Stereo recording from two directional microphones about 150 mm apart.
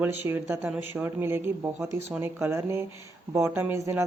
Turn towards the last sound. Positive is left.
turn(degrees=-20)  # may be behind; listen again after turning